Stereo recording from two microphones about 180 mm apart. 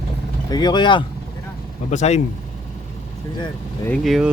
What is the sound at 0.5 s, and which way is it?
Speech, 25° left (ahead or behind).